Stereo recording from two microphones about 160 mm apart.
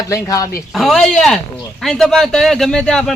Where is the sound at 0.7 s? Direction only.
Centre (ahead or behind).